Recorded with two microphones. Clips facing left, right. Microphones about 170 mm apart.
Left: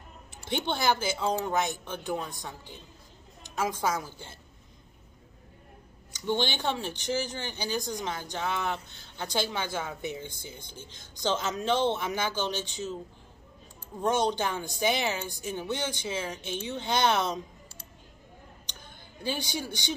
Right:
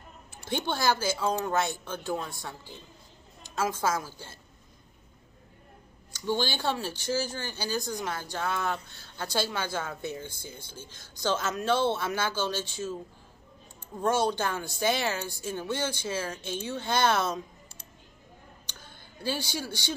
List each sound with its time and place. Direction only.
0.5 s speech: 20° left (ahead or behind)
6.1 s speech: 20° left (ahead or behind)
14.0 s speech: 20° left (ahead or behind)
18.7 s a sound: 15° left (ahead or behind)